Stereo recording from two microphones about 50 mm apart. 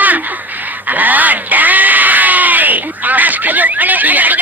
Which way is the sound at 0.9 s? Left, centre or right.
Right.